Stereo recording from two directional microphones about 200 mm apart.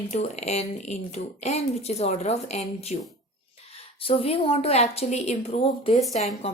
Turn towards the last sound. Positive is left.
turn(degrees=35)  # may be behind; listen again after turning